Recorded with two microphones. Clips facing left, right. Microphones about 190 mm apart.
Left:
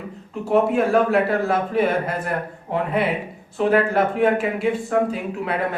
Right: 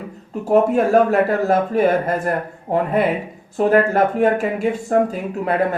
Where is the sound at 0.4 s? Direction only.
40° right (ahead or behind).